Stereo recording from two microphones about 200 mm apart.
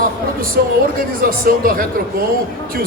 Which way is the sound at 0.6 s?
50° right (ahead or behind).